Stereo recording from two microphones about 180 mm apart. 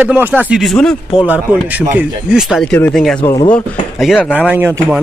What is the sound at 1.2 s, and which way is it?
Speech, 10° right (ahead or behind).